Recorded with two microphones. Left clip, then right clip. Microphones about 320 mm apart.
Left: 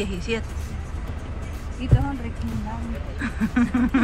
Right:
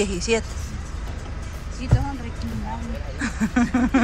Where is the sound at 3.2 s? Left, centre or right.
Centre.